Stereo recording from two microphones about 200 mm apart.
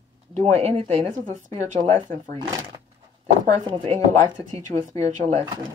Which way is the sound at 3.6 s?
30° right (ahead or behind).